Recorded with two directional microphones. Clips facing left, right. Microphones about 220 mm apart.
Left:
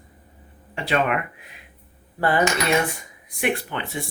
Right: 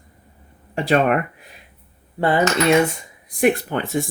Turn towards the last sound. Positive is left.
turn(degrees=-45)  # may be behind; listen again after turning